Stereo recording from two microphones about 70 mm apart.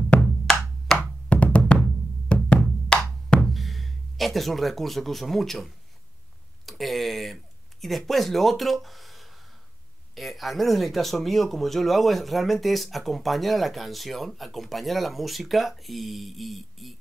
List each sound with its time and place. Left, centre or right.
0.2 s music: centre
0.9 s music: left
3.3 s speech: centre
6.6 s a sound: centre
7.8 s speech: centre